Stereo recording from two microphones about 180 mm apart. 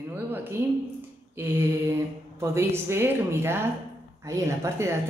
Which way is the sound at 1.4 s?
10° right (ahead or behind).